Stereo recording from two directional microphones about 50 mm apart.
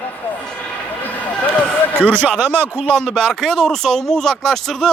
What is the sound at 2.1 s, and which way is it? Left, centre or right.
Speech, right.